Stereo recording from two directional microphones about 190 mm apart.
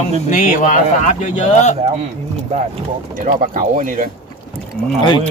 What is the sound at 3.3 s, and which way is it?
Speech, 40° right (ahead or behind).